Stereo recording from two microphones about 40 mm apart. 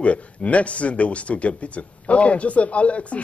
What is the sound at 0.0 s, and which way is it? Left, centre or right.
Speech, left.